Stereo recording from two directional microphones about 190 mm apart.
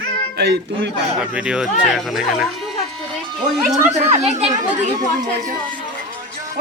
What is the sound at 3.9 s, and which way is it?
Speech, 35° right (ahead or behind).